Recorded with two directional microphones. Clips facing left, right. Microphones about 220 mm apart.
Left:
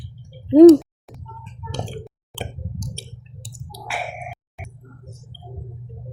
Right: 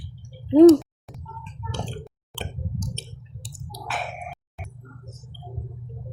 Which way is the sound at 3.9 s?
10° left (ahead or behind).